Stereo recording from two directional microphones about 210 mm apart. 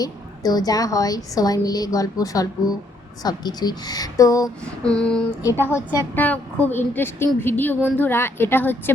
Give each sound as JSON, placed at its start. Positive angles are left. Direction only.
{"t": 0.0, "sound": "a woman's voice", "side_deg": 20}
{"t": 4.6, "sound": "female singing", "side_deg": 5}
{"t": 5.6, "sound": "a woman's voice", "side_deg": 10}